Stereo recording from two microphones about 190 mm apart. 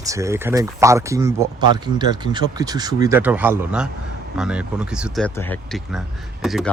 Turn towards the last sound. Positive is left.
turn(degrees=0)  # may be behind; listen again after turning